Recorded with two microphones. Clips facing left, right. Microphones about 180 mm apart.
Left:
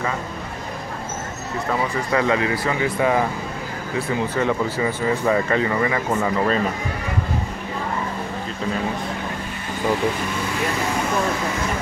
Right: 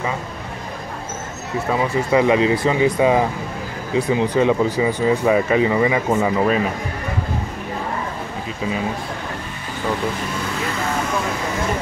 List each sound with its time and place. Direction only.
1.7 s speech: 15° right (ahead or behind)